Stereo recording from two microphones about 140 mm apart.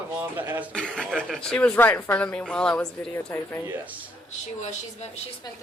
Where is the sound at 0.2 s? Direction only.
15° right (ahead or behind).